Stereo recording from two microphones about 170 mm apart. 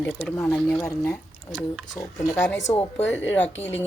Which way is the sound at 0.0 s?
10° left (ahead or behind).